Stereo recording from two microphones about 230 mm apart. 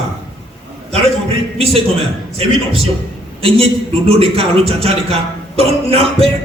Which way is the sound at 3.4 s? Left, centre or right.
Right.